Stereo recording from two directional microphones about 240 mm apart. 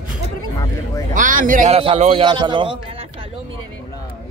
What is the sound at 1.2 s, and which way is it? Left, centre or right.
A man's voice, right.